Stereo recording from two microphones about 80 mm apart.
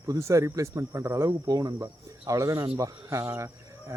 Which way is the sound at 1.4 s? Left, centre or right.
Right.